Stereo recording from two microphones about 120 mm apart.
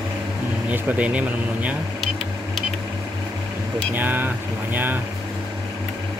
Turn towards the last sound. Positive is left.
turn(degrees=-15)  # may be behind; listen again after turning